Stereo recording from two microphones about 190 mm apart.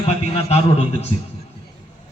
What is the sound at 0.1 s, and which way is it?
Speech, 35° left (ahead or behind).